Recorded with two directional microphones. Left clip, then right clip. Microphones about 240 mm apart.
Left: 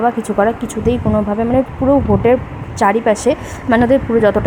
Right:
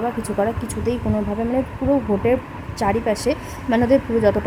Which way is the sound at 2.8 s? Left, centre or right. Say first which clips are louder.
Left 7 dB; centre.